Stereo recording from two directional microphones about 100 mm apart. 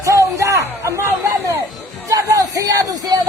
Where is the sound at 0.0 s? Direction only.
30° right (ahead or behind).